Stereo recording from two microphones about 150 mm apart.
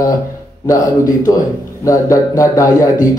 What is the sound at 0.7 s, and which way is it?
A man's voice, 25° left (ahead or behind).